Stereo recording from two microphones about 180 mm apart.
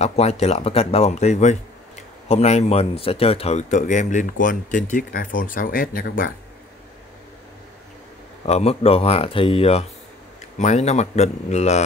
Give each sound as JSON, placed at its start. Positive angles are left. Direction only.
{"t": 0.0, "sound": "speech", "side_deg": 35}
{"t": 8.5, "sound": "speech", "side_deg": 35}